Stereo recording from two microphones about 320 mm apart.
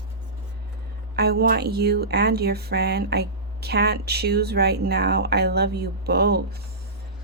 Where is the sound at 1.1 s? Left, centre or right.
Right.